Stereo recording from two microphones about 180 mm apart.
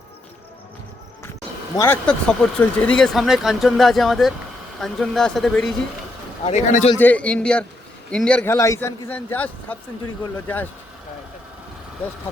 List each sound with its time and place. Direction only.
1.7 s speech: 15° left (ahead or behind)
6.4 s speech: 35° left (ahead or behind)
7.0 s a man's voice: 10° left (ahead or behind)
8.5 s a man's voice: 15° left (ahead or behind)